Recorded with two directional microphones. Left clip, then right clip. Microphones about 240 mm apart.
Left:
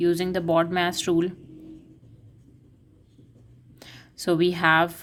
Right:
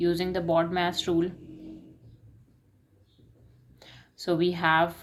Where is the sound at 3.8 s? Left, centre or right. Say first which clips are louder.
Left 4 dB; left.